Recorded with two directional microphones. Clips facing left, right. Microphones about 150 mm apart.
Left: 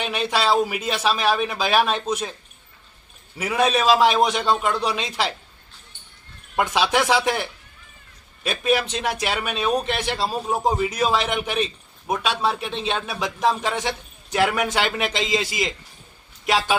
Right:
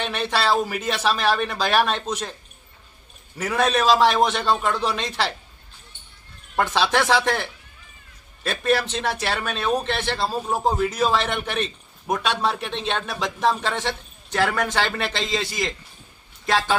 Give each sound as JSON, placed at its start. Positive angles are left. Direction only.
{"t": 0.0, "sound": "a man's voice", "side_deg": 10}
{"t": 3.3, "sound": "a man's voice", "side_deg": 10}
{"t": 6.6, "sound": "a man's voice", "side_deg": 10}
{"t": 10.3, "sound": "a man's voice", "side_deg": 0}
{"t": 10.6, "sound": "a man's voice", "side_deg": 10}
{"t": 14.5, "sound": "a man's voice", "side_deg": 15}
{"t": 16.5, "sound": "a man's voice", "side_deg": 20}